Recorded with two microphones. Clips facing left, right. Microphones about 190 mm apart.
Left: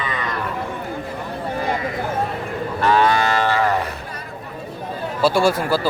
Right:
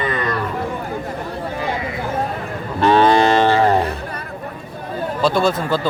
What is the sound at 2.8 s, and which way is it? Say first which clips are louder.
Cattle: right 4 dB; 25° right (ahead or behind).